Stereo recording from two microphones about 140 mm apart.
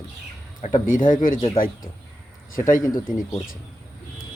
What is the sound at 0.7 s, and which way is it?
Speech, 70° left (ahead or behind).